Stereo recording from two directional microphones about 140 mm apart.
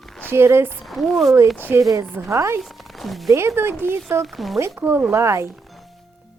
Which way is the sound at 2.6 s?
Centre (ahead or behind).